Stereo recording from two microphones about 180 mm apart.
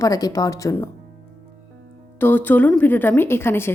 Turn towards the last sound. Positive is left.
turn(degrees=15)  # may be behind; listen again after turning